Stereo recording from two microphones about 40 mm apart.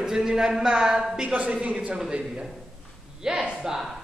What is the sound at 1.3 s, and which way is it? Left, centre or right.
Speech, right.